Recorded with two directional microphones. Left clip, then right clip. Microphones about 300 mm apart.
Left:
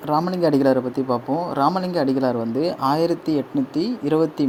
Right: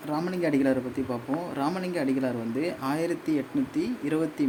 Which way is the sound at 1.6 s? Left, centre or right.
Centre.